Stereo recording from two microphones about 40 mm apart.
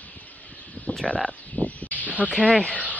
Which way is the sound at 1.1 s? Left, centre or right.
Left.